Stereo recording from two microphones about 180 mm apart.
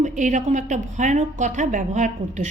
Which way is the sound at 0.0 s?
45° right (ahead or behind).